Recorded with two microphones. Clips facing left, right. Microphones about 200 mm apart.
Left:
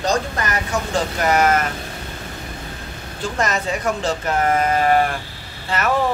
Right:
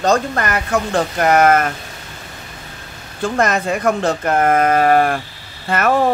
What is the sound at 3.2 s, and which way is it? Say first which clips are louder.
Speech: right 5 dB; 55° right (ahead or behind).